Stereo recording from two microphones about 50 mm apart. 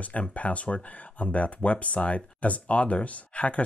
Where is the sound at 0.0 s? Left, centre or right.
Left.